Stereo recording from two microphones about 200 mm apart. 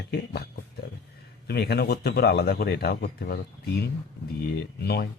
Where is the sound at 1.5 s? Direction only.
55° left (ahead or behind).